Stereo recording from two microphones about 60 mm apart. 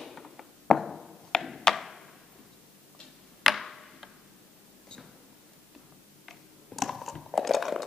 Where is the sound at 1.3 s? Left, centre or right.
Centre.